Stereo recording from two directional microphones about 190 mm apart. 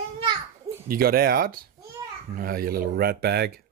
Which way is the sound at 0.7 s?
15° right (ahead or behind).